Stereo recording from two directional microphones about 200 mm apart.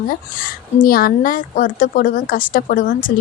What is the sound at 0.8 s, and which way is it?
A woman's voice, 45° left (ahead or behind).